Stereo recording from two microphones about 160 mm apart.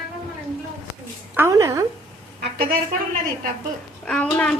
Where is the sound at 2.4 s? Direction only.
70° right (ahead or behind).